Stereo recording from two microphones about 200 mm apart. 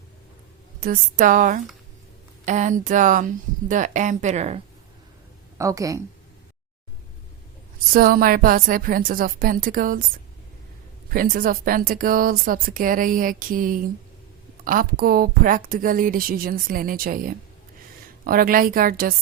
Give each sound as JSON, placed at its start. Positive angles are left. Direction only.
{"t": 0.8, "sound": "speech", "side_deg": -45}
{"t": 5.5, "sound": "speech", "side_deg": -15}
{"t": 7.9, "sound": "speech", "side_deg": -45}
{"t": 11.1, "sound": "speech", "side_deg": -45}